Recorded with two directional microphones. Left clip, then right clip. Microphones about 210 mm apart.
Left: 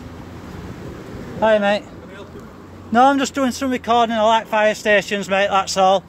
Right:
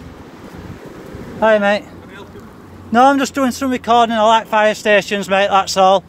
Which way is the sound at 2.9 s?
5° right (ahead or behind).